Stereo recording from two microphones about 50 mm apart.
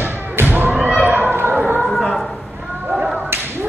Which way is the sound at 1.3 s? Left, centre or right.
Right.